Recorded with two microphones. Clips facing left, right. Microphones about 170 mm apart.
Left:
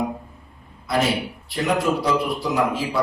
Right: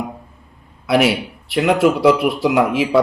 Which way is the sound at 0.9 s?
75° right (ahead or behind).